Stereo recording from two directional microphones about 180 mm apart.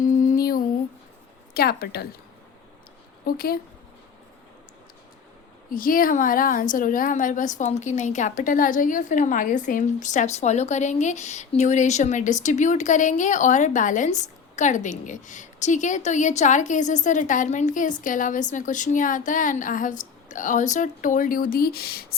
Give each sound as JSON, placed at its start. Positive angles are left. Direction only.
{"t": 0.0, "sound": "a sound", "side_deg": 45}
{"t": 1.5, "sound": "a woman's voice", "side_deg": 60}
{"t": 3.2, "sound": "a woman's voice", "side_deg": 55}
{"t": 5.7, "sound": "a woman's voice", "side_deg": 50}